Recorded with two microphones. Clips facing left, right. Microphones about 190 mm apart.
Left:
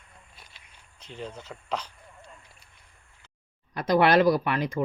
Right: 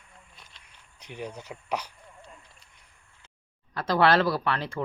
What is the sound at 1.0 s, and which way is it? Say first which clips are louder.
Speech: right 1 dB; 15° right (ahead or behind).